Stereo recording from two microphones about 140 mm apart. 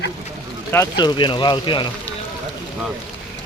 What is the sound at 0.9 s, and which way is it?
Speech, 35° left (ahead or behind).